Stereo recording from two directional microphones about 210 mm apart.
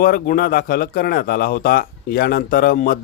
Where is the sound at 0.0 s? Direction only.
45° left (ahead or behind).